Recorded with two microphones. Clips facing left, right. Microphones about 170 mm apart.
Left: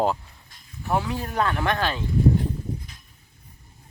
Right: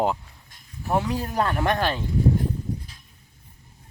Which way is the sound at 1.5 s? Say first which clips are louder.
Right 1 dB; 25° right (ahead or behind).